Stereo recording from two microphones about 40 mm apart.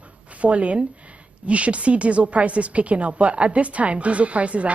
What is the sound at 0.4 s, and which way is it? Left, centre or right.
A woman's voice, right.